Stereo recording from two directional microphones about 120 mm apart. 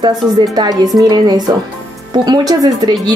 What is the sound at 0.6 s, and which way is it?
Speech, 30° right (ahead or behind).